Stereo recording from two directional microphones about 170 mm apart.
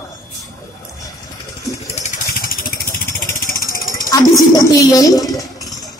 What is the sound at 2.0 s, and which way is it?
Vehicle, 40° left (ahead or behind).